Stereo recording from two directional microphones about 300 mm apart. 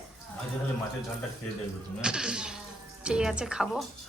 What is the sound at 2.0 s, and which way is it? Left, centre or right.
A woman's voice, centre.